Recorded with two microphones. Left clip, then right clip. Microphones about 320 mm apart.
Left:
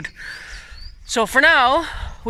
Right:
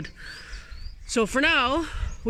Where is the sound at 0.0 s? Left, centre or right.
Centre.